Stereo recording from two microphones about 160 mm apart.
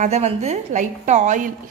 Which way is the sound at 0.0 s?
45° right (ahead or behind).